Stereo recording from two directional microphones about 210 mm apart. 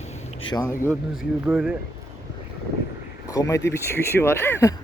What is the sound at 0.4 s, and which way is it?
Speech, 20° left (ahead or behind).